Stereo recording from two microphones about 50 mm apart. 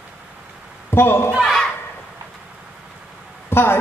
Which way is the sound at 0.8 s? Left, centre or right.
Left.